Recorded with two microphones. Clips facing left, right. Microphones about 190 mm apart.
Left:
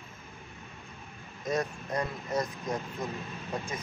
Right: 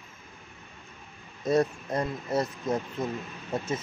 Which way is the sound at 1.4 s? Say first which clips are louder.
Right 7 dB; 30° right (ahead or behind).